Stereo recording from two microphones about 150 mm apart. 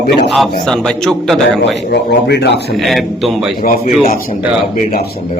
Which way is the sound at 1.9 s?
90° left.